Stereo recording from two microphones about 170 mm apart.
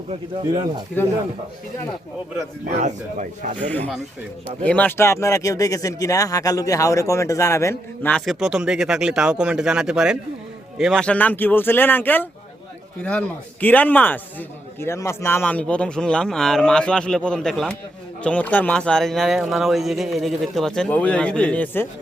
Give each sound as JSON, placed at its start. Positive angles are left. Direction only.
{"t": 2.8, "sound": "speech", "side_deg": -45}
{"t": 3.6, "sound": "a man's voice", "side_deg": 10}
{"t": 8.1, "sound": "a man's voice", "side_deg": 0}